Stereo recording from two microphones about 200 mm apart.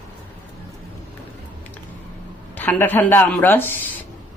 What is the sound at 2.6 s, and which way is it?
A woman's voice, 10° left (ahead or behind).